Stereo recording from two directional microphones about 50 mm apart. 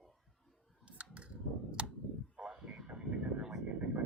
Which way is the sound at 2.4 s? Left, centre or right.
Right.